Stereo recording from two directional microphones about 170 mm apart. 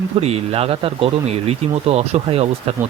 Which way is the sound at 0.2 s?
35° right (ahead or behind).